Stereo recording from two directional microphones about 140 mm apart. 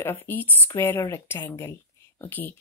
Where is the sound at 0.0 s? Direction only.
15° left (ahead or behind).